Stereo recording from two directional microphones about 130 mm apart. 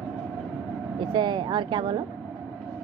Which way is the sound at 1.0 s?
35° right (ahead or behind).